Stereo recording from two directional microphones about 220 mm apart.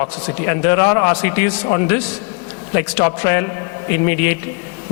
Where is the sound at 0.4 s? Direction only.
15° left (ahead or behind).